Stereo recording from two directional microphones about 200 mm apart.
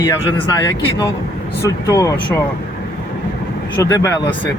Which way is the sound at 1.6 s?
15° left (ahead or behind).